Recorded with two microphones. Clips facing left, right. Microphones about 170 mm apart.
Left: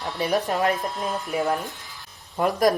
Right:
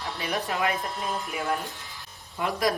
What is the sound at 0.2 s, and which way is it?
Speech, 40° left (ahead or behind).